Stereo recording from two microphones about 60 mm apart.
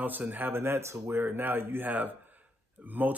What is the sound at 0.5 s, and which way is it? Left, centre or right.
A man's voice, right.